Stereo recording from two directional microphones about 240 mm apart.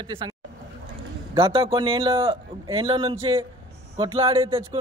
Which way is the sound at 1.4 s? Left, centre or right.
Right.